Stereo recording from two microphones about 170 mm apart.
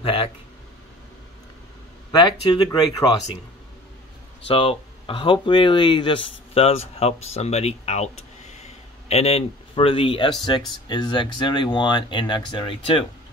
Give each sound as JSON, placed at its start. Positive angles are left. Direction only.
{"t": 0.0, "sound": "speech", "side_deg": 30}
{"t": 2.1, "sound": "speech", "side_deg": 25}
{"t": 4.5, "sound": "speech", "side_deg": 30}